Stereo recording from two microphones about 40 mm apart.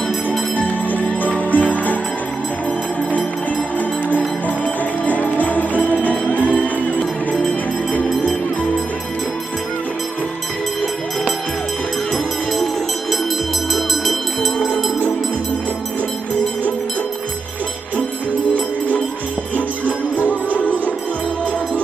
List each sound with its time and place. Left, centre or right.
0.5 s music: left
4.4 s music: left
13.7 s music: centre